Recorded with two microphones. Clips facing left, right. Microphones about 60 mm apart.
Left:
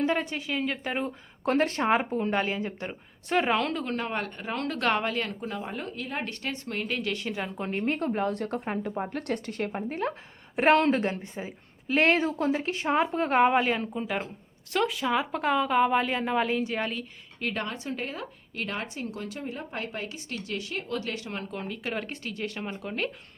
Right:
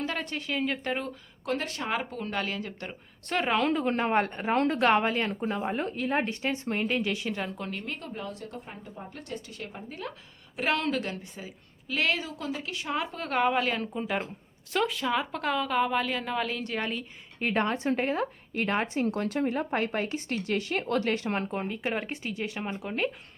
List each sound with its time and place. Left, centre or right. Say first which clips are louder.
0.0 s a woman's voice: left 5 dB; centre
1.5 s speech: left 7 dB; left; by 3.6 s centre
3.6 s speech: right 3 dB; centre
3.8 s speech: right 5 dB; right
4.8 s speech: right 3 dB; centre; by 6.2 s right
6.2 s speech: right 4 dB; centre
7.5 s a woman's voice: left 7 dB; left
13.9 s a woman's voice: even; centre
17.4 s a woman's voice: right 5 dB; right
21.5 s speech: right 3 dB; right
21.8 s speech: right 2 dB; centre